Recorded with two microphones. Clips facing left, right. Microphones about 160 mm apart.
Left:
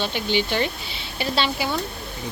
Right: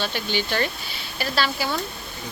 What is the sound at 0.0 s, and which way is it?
A woman's voice, 20° left (ahead or behind).